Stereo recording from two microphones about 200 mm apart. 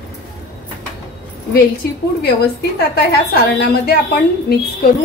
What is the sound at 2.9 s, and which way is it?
A woman's voice, 50° left (ahead or behind).